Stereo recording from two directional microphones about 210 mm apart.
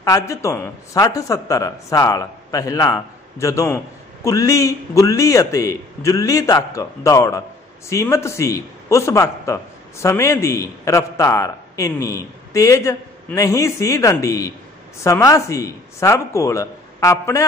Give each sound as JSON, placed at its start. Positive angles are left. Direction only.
{"t": 0.0, "sound": "speech", "side_deg": 15}